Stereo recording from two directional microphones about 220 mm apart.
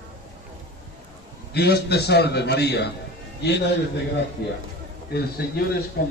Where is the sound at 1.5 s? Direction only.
45° left (ahead or behind).